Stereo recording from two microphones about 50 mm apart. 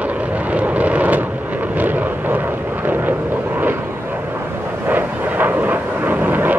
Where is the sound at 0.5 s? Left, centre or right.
Right.